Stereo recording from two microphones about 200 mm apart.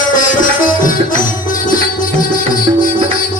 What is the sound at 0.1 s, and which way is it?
Music, 40° left (ahead or behind).